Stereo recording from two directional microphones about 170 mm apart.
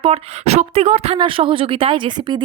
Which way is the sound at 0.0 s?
35° right (ahead or behind).